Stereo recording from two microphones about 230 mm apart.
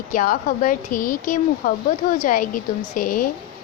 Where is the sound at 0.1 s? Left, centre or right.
Left.